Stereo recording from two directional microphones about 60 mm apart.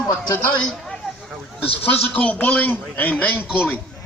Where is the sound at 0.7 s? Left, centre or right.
Centre.